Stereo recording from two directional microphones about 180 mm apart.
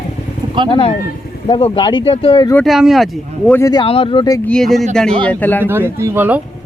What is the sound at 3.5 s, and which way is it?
Speech, 20° left (ahead or behind).